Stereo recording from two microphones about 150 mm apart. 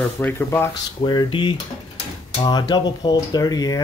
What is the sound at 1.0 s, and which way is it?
Speech, 35° left (ahead or behind).